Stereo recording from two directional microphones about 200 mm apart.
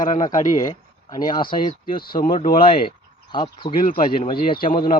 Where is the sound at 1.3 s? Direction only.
25° left (ahead or behind).